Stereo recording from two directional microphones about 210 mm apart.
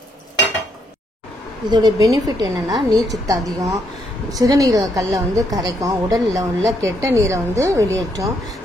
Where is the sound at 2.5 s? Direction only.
Centre (ahead or behind).